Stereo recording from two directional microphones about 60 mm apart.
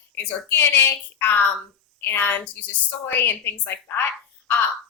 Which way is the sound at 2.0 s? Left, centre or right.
Left.